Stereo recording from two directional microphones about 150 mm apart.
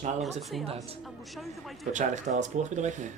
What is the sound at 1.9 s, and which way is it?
Speech, 50° right (ahead or behind).